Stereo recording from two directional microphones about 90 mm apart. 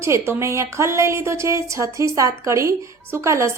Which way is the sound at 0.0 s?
30° right (ahead or behind).